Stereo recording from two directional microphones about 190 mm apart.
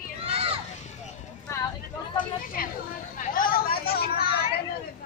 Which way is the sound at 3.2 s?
45° left (ahead or behind).